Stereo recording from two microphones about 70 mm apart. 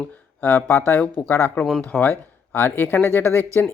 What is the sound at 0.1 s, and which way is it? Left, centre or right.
Speech, left.